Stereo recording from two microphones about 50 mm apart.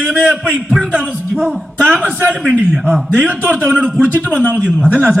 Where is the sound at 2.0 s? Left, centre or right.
Right.